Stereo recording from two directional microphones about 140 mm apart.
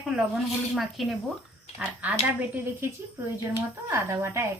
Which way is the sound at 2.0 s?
10° right (ahead or behind).